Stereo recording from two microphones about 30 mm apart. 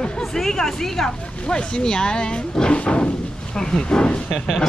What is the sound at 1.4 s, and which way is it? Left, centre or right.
Speech, left.